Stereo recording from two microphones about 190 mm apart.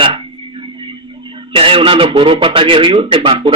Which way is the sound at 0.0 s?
25° right (ahead or behind).